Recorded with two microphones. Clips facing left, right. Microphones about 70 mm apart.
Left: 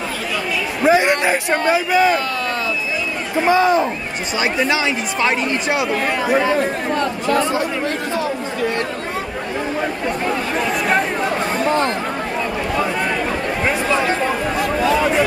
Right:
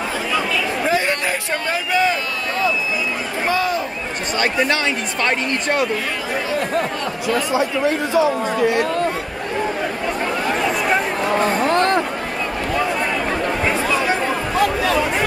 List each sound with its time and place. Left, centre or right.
0.8 s a man's voice: centre
3.4 s speech: left
4.4 s a man's voice: centre
7.5 s speech: centre
11.7 s chatter: right